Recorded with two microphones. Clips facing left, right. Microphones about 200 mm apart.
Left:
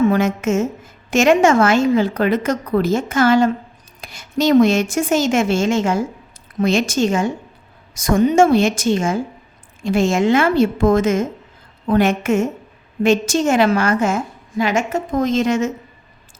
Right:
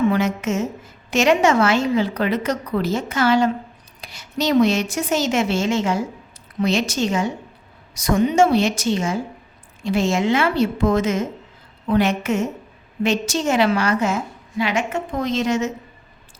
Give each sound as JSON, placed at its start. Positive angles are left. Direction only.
{"t": 0.1, "sound": "a woman's voice", "side_deg": 50}